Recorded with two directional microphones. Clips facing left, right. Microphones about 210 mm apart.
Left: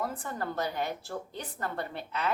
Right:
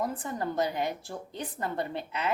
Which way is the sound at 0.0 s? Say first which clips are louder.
Right 3 dB; 15° right (ahead or behind).